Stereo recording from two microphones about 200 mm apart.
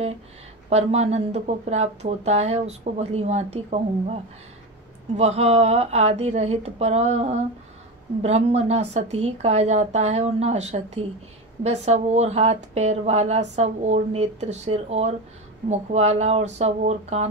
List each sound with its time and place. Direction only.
0.7 s speech: 30° right (ahead or behind)